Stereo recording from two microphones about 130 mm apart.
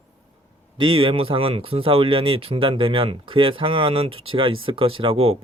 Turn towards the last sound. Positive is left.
turn(degrees=-45)  # may be behind; listen again after turning